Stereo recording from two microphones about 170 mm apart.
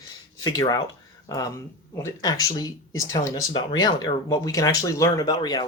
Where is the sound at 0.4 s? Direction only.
20° left (ahead or behind).